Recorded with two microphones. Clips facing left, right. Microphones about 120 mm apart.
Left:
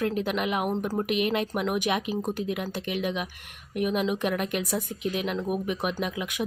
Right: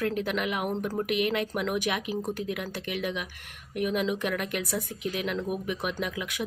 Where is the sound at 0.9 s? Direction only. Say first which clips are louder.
Left 1 dB; 25° left (ahead or behind).